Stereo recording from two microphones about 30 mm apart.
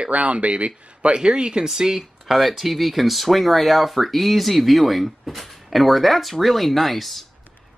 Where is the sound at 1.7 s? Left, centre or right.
Centre.